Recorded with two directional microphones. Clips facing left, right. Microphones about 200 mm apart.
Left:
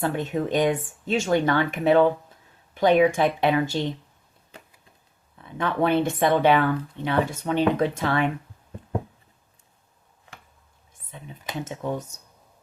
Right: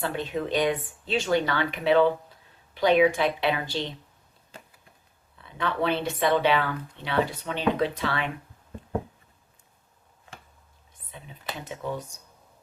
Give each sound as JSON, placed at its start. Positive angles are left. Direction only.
{"t": 0.0, "sound": "speech", "side_deg": 45}
{"t": 5.5, "sound": "speech", "side_deg": 50}